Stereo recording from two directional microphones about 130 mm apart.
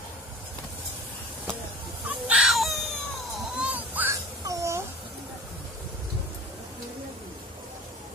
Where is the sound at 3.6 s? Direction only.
15° right (ahead or behind).